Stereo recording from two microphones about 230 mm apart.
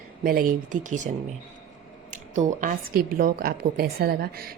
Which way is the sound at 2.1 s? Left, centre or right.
Right.